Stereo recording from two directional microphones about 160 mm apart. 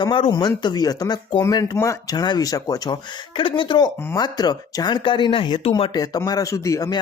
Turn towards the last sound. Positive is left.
turn(degrees=20)  # may be behind; listen again after turning